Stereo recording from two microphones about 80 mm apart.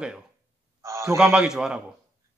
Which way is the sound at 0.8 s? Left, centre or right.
Right.